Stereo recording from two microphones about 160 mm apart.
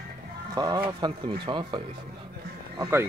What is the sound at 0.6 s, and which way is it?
Speech, 25° right (ahead or behind).